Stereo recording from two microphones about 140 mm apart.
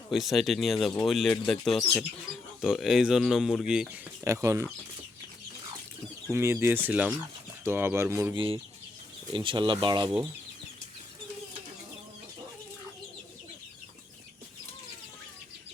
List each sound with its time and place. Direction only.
0.1 s speech: centre (ahead or behind)
4.2 s speech: 20° right (ahead or behind)
6.3 s speech: 15° right (ahead or behind)
9.3 s speech: 35° right (ahead or behind)